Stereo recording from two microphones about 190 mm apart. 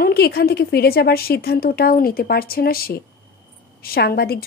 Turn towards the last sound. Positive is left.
turn(degrees=55)  # may be behind; listen again after turning